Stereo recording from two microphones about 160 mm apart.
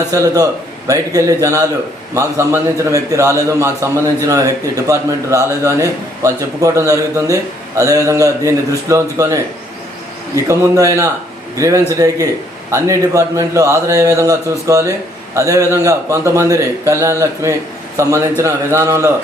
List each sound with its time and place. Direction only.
0.1 s a man's voice: 20° right (ahead or behind)
10.5 s a man's voice: 20° right (ahead or behind)